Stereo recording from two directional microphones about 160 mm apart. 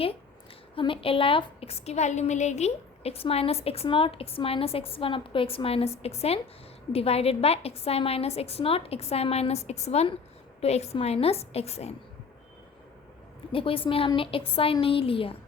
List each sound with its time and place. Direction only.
0.8 s a woman's voice: 35° left (ahead or behind)
13.5 s a woman's voice: 35° left (ahead or behind)